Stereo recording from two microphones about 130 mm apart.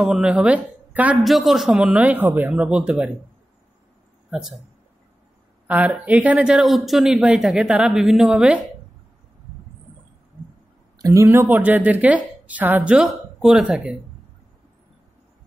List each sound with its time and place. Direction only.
0.0 s speech: 5° right (ahead or behind)
1.2 s a woman's voice: centre (ahead or behind)
4.3 s speech: 5° right (ahead or behind)
5.7 s speech: 10° right (ahead or behind)
11.0 s speech: 30° right (ahead or behind)
11.2 s a woman's voice: 15° right (ahead or behind)